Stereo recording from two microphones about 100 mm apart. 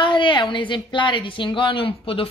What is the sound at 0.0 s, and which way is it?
Speech, 55° left (ahead or behind).